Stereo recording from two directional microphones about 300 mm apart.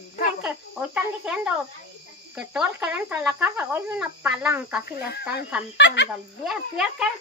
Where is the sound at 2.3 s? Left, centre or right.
Centre.